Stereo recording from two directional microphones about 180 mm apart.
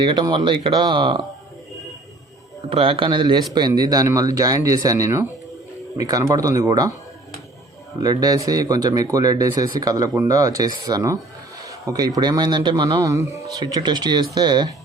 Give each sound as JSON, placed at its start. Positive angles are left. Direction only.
{"t": 0.0, "sound": "speech", "side_deg": -25}
{"t": 2.6, "sound": "speech", "side_deg": -30}
{"t": 8.0, "sound": "speech", "side_deg": -20}